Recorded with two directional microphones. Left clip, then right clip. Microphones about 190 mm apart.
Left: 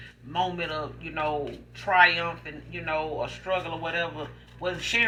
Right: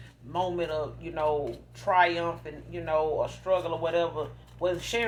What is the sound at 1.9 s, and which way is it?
Speech, 55° right (ahead or behind).